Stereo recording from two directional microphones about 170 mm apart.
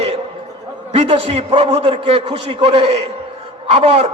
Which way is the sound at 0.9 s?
35° right (ahead or behind).